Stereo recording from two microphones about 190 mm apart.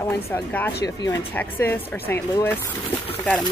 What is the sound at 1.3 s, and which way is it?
Speech, 10° left (ahead or behind).